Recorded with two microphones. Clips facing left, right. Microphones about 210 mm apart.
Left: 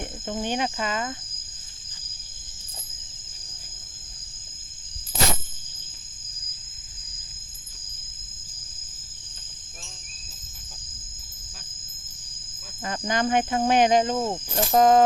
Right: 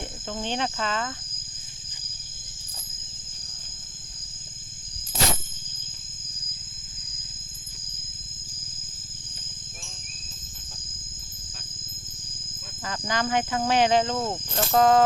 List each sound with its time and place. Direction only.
0.3 s cricket: 10° left (ahead or behind)
12.8 s speech: 20° left (ahead or behind)